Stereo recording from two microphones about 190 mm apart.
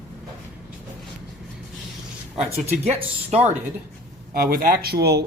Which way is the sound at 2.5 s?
35° right (ahead or behind).